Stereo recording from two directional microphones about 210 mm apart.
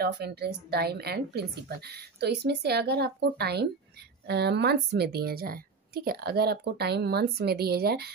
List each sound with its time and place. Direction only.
0.0 s a woman's voice: 50° right (ahead or behind)